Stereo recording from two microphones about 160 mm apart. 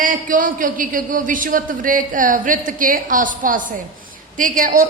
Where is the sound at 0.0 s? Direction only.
55° right (ahead or behind).